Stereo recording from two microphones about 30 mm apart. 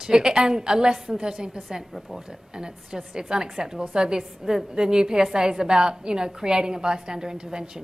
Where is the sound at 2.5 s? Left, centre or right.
Right.